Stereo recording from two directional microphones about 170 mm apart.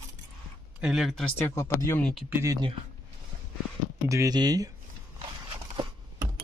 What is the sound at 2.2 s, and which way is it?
Speech, 15° right (ahead or behind).